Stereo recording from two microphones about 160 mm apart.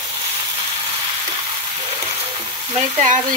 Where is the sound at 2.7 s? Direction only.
45° right (ahead or behind).